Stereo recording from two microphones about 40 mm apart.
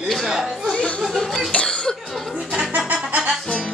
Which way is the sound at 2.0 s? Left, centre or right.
Centre.